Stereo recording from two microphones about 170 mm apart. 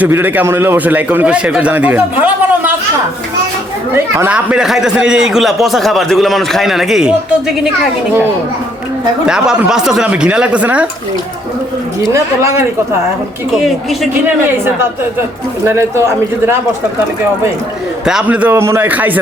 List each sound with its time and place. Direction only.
0.0 s a man's voice: 10° right (ahead or behind)
3.9 s a man's voice: 15° right (ahead or behind)
9.2 s a man's voice: 5° right (ahead or behind)
12.1 s a man's voice: 15° right (ahead or behind)
15.6 s a man's voice: 15° right (ahead or behind)
18.0 s a man's voice: 5° right (ahead or behind)